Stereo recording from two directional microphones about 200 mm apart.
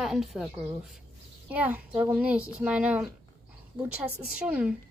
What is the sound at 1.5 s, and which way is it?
A woman's voice, 10° right (ahead or behind).